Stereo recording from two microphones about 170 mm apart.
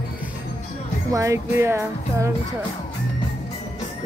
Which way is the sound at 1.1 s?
15° right (ahead or behind).